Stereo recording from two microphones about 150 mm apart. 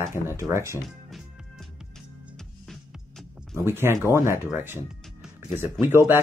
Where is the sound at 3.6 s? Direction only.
15° right (ahead or behind).